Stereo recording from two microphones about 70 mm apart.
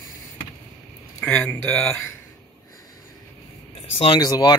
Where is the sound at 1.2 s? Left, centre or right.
Centre.